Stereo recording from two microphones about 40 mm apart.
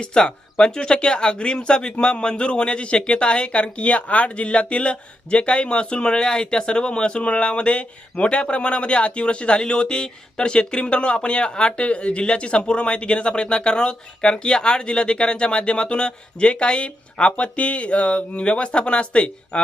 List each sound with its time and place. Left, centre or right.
0.0 s speech: left